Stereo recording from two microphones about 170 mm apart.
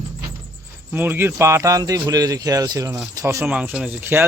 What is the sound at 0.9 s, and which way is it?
A man's voice, 15° right (ahead or behind).